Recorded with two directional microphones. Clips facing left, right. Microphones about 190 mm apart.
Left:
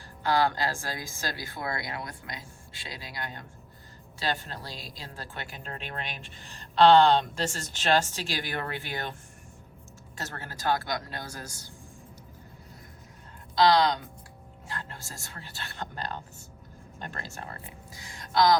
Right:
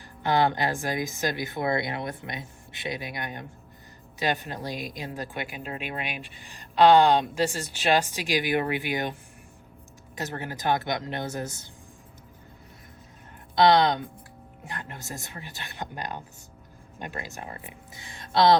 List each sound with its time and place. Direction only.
0.2 s speech: 20° right (ahead or behind)
10.2 s speech: 15° right (ahead or behind)
13.6 s speech: 20° right (ahead or behind)